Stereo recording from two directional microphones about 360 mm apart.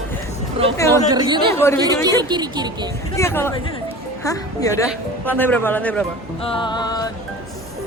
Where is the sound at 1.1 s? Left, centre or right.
Centre.